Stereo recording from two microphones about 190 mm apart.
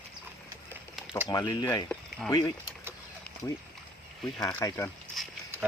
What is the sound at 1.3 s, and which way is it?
Speech, 20° left (ahead or behind).